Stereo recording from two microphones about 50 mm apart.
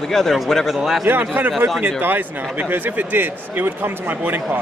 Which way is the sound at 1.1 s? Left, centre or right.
Right.